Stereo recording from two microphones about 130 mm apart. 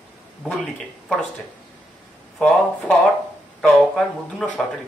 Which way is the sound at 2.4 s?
5° left (ahead or behind).